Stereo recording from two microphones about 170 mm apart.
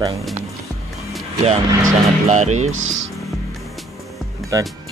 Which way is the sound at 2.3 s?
40° right (ahead or behind).